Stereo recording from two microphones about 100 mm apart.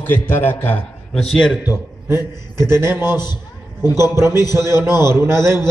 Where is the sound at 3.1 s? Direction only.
45° left (ahead or behind).